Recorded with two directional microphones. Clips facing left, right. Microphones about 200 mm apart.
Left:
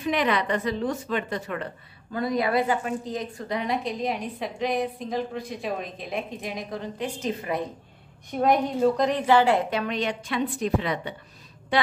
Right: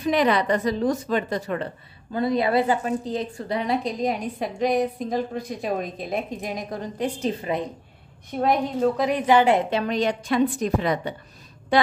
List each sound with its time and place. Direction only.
0.0 s a woman's voice: 35° right (ahead or behind)
8.3 s a woman's voice: centre (ahead or behind); by 11.1 s 40° right (ahead or behind)